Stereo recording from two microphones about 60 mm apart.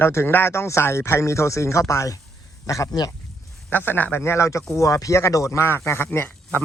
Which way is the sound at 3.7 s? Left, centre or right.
Left.